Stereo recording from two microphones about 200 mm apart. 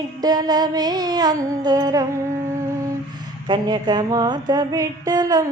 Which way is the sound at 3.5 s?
20° right (ahead or behind).